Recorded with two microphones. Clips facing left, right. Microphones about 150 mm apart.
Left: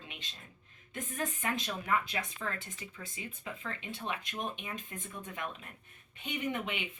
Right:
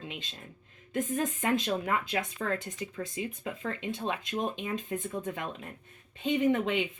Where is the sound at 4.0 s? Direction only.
25° right (ahead or behind).